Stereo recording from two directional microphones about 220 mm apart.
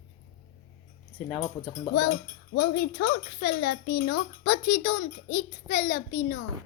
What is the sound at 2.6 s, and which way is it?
Speech, 45° left (ahead or behind).